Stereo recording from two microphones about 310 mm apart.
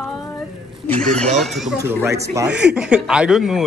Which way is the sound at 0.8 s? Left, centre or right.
Centre.